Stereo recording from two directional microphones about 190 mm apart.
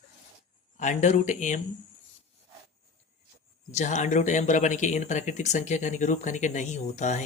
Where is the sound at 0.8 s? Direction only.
40° left (ahead or behind).